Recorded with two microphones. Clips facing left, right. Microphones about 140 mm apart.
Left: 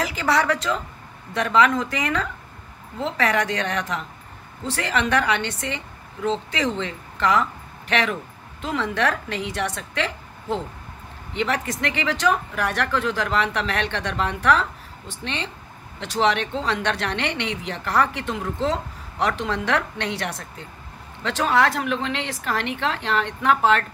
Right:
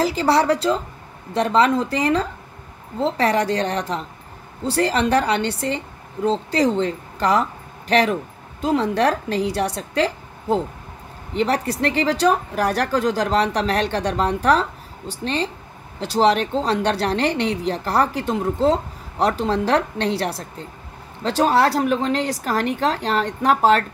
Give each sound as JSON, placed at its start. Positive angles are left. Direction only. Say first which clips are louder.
{"t": 0.0, "sound": "a woman's voice", "louder": "right 4 dB", "side_deg": -30}